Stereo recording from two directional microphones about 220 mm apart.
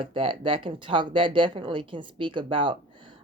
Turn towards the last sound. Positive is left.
turn(degrees=-20)  # may be behind; listen again after turning